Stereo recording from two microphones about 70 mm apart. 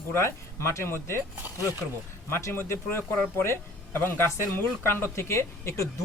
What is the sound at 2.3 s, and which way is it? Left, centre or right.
Speech, left.